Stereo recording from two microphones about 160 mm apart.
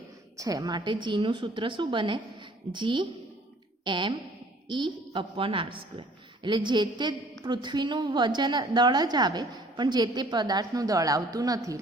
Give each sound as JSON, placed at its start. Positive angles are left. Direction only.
{"t": 0.3, "sound": "a woman's voice", "side_deg": -20}